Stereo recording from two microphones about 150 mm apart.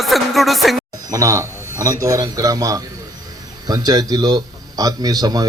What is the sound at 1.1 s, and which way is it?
A man's voice, 20° right (ahead or behind).